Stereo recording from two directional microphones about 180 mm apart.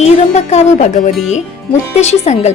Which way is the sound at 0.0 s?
40° left (ahead or behind).